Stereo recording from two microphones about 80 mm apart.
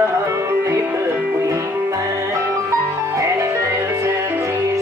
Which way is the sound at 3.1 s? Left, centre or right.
Right.